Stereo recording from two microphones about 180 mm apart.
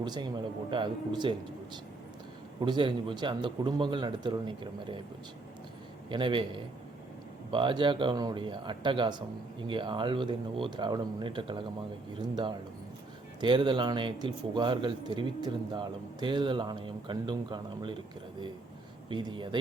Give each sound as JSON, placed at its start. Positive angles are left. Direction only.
{"t": 0.0, "sound": "speech", "side_deg": -25}
{"t": 6.1, "sound": "speech", "side_deg": -25}
{"t": 19.1, "sound": "speech", "side_deg": -25}